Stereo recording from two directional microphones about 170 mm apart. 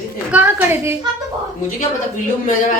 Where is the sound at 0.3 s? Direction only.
10° right (ahead or behind).